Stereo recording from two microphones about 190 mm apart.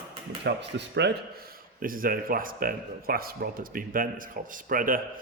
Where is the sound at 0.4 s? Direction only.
65° right (ahead or behind).